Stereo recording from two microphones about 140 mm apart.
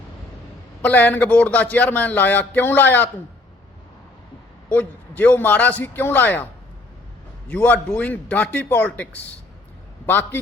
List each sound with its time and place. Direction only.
0.8 s speech: 10° left (ahead or behind)
4.7 s speech: 10° left (ahead or behind)
7.5 s speech: 10° left (ahead or behind)